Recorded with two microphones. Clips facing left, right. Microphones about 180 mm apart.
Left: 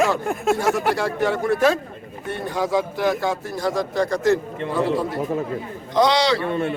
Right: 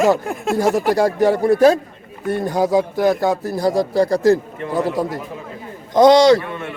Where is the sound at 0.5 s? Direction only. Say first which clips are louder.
Right 7 dB; 40° right (ahead or behind).